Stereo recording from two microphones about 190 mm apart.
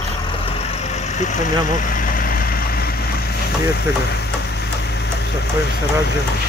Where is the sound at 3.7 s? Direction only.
60° left (ahead or behind).